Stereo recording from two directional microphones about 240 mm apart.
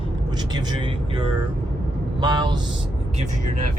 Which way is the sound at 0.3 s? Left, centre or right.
Centre.